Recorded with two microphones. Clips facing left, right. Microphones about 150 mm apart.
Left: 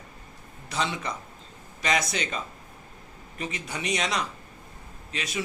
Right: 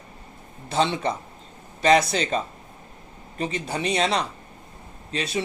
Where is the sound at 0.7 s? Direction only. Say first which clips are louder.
Right 7 dB; 30° right (ahead or behind).